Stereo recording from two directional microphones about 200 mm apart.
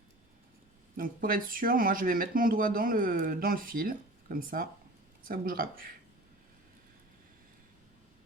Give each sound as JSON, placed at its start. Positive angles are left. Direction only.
{"t": 0.9, "sound": "speech", "side_deg": -45}